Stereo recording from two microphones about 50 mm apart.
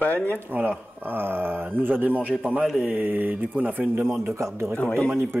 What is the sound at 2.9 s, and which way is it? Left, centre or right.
A man's voice, right.